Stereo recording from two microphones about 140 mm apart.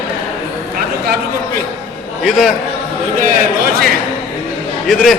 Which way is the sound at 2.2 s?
5° right (ahead or behind).